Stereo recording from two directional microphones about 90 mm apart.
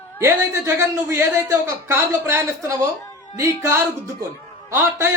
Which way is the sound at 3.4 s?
30° right (ahead or behind).